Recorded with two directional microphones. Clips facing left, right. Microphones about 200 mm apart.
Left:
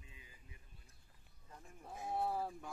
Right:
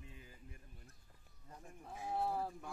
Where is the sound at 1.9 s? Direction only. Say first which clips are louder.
Even; centre (ahead or behind).